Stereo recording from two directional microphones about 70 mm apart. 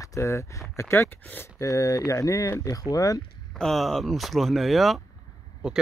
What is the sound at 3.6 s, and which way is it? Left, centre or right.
Speech, centre.